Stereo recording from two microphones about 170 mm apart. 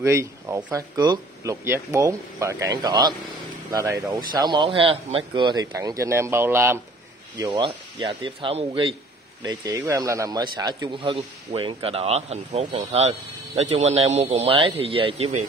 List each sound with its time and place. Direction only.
0.0 s speech: 15° right (ahead or behind)
7.3 s speech: 25° right (ahead or behind)